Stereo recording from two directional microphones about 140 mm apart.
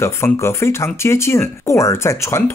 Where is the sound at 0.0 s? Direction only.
20° left (ahead or behind).